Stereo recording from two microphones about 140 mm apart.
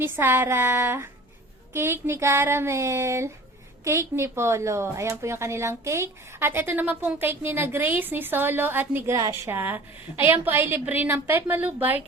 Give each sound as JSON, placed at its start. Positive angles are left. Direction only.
{"t": 0.0, "sound": "speech", "side_deg": -15}
{"t": 1.7, "sound": "a sound", "side_deg": -15}
{"t": 3.8, "sound": "speech", "side_deg": -20}